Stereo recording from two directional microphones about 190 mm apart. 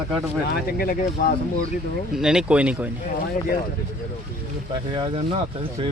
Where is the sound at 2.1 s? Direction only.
5° right (ahead or behind).